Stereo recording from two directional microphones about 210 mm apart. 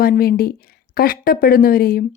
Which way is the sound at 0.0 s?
45° left (ahead or behind).